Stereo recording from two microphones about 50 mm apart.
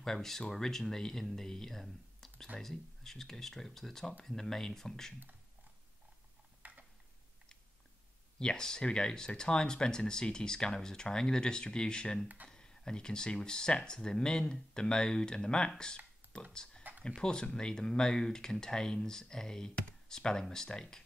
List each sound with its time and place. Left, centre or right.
0.0 s speech: centre
6.6 s a sound: right
8.4 s speech: centre